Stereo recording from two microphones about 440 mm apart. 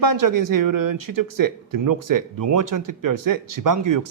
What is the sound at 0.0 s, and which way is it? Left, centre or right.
Speech, right.